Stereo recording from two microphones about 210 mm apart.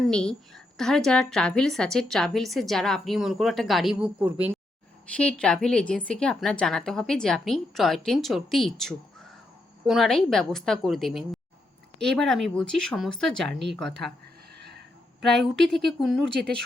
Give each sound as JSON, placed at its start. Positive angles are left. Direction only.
{"t": 0.1, "sound": "a woman's voice", "side_deg": 5}
{"t": 5.1, "sound": "a woman's voice", "side_deg": 5}
{"t": 14.6, "sound": "a sound", "side_deg": -50}
{"t": 15.2, "sound": "a woman's voice", "side_deg": 0}